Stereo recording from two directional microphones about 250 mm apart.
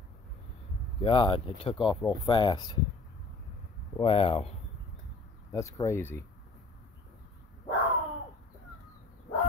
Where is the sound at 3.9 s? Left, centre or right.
Left.